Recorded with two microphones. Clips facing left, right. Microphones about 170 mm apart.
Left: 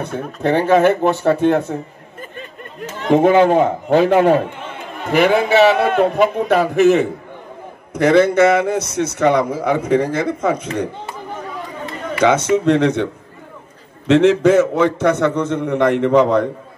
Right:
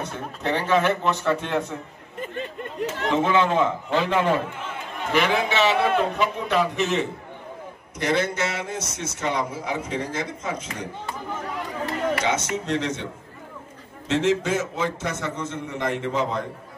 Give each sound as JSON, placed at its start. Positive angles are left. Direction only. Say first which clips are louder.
{"t": 0.4, "sound": "a man's voice", "louder": "left 9 dB", "side_deg": 50}
{"t": 3.1, "sound": "a man's voice", "louder": "left 10 dB", "side_deg": 50}
{"t": 12.2, "sound": "a man's voice", "louder": "left 11 dB", "side_deg": 60}